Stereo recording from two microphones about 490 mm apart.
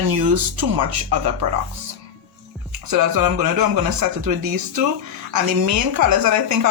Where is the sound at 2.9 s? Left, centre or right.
Right.